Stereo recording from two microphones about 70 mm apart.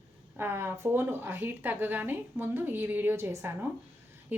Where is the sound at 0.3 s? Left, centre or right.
Right.